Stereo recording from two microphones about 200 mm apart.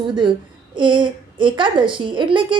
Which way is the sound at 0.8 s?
25° right (ahead or behind).